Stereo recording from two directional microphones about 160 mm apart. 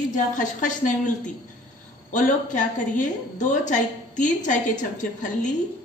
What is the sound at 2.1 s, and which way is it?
A woman's voice, 50° left (ahead or behind).